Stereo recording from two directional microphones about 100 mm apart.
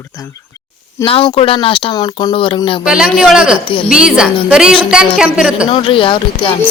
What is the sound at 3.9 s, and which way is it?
A woman's voice, 10° right (ahead or behind).